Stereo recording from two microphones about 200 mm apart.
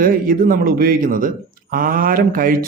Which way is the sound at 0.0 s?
45° right (ahead or behind).